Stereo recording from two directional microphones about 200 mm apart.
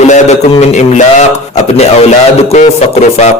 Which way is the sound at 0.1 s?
35° left (ahead or behind).